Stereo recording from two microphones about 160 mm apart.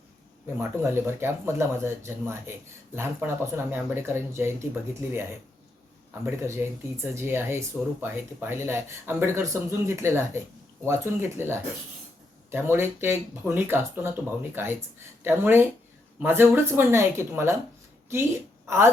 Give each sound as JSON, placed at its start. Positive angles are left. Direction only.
{"t": 0.6, "sound": "speech", "side_deg": -15}
{"t": 6.2, "sound": "a woman's voice", "side_deg": -15}